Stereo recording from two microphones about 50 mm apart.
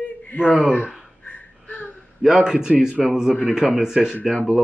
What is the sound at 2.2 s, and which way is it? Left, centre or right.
Speech, centre.